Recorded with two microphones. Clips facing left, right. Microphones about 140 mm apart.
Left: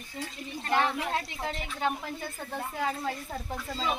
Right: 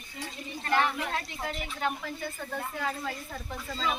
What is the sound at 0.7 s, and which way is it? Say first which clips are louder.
Speech: even; 25° left (ahead or behind).